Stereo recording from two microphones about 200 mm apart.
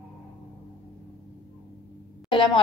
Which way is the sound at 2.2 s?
25° left (ahead or behind).